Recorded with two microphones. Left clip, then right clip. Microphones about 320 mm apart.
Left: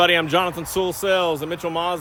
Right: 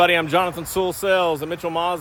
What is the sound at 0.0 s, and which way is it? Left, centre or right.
Speech, centre.